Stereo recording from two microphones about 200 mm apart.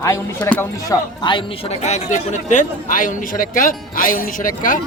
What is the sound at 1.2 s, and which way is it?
A man's voice, 25° left (ahead or behind).